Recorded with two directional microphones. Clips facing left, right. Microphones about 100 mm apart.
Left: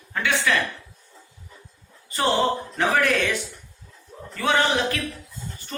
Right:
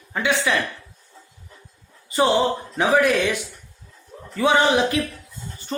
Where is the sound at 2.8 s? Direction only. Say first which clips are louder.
Right 4 dB; 15° right (ahead or behind).